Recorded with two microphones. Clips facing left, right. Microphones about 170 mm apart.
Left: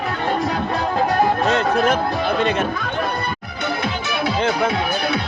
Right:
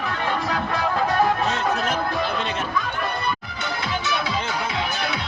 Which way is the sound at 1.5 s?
65° left (ahead or behind).